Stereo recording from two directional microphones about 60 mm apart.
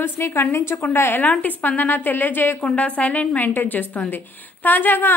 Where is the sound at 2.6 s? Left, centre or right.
Left.